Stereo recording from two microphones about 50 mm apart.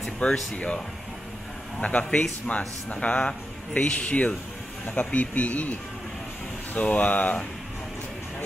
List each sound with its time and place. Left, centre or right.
0.2 s a man's voice: left
1.8 s a man's voice: left